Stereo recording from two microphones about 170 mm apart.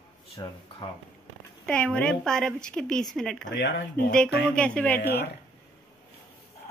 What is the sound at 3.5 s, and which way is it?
Speech, 90° left.